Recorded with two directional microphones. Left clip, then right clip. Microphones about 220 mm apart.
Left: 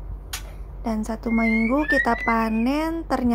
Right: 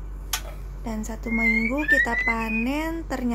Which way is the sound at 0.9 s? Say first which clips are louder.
Left 4 dB; 20° left (ahead or behind).